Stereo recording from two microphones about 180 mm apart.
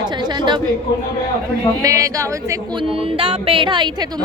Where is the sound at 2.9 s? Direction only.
30° right (ahead or behind).